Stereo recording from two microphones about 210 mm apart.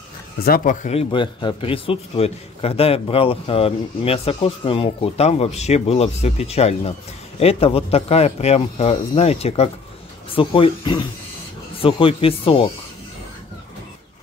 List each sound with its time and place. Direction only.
0.4 s speech: 45° left (ahead or behind)
0.8 s a man's voice: 25° left (ahead or behind)